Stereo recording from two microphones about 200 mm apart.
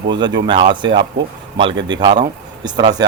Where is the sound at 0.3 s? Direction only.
25° right (ahead or behind).